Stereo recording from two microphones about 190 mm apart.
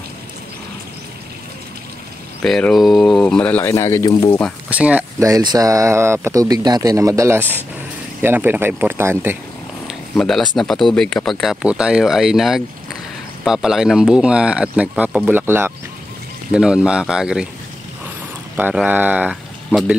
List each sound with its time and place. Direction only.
2.4 s speech: centre (ahead or behind); by 4.4 s 20° left (ahead or behind)
4.6 s speech: 5° right (ahead or behind)
9.8 s speech: centre (ahead or behind)
18.6 s speech: 10° right (ahead or behind)